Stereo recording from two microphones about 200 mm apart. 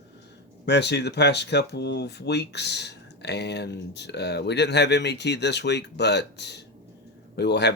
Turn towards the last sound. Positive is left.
turn(degrees=60)  # may be behind; listen again after turning